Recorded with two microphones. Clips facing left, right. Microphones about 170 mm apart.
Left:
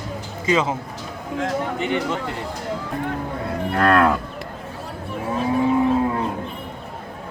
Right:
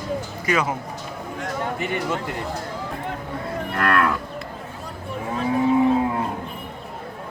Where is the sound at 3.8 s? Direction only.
30° left (ahead or behind).